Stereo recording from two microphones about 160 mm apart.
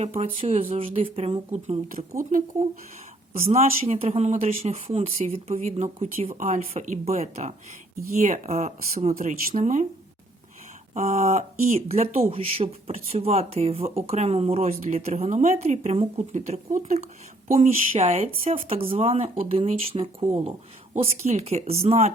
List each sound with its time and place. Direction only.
0.0 s speech: 40° right (ahead or behind); by 2.4 s 60° right (ahead or behind)
3.4 s speech: 40° right (ahead or behind)
9.1 s speech: 60° right (ahead or behind)
10.9 s speech: 45° right (ahead or behind)